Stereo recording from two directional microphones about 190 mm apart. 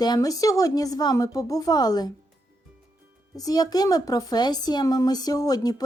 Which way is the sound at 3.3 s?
20° left (ahead or behind).